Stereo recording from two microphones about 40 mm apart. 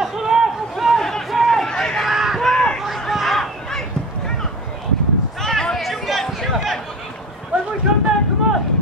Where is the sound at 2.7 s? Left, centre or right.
Centre.